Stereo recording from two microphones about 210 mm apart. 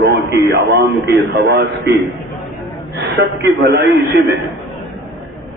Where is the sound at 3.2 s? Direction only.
50° right (ahead or behind).